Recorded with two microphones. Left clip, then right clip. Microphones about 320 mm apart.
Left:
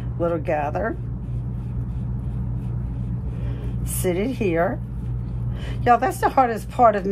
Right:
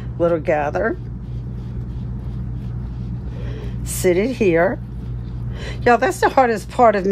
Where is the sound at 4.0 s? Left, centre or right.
Right.